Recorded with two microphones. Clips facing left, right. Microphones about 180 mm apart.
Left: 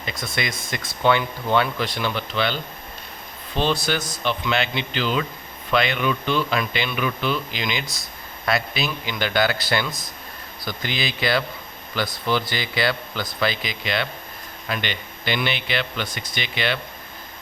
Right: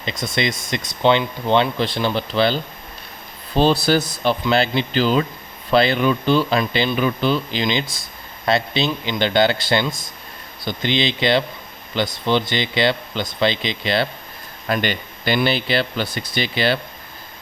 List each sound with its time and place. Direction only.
0.0 s speech: 25° right (ahead or behind)
14.7 s speech: 45° right (ahead or behind)